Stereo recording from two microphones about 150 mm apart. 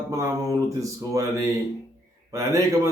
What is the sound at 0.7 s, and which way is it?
Speech, 20° right (ahead or behind).